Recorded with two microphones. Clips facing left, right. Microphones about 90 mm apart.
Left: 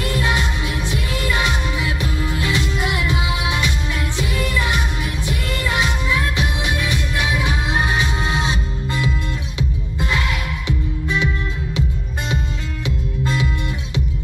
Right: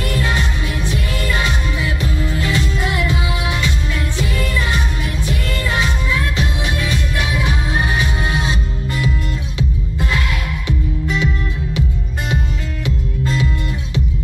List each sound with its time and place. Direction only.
0.0 s music: 20° left (ahead or behind)
12.8 s music: 20° left (ahead or behind)